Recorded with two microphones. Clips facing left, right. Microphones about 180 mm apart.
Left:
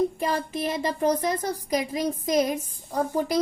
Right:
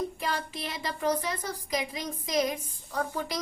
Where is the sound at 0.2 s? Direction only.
45° left (ahead or behind).